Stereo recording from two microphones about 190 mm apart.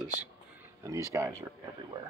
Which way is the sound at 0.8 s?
15° right (ahead or behind).